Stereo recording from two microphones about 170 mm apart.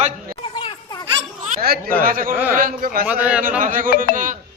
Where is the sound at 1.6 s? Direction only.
60° right (ahead or behind).